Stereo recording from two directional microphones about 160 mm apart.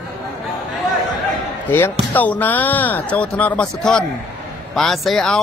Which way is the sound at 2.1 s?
10° left (ahead or behind).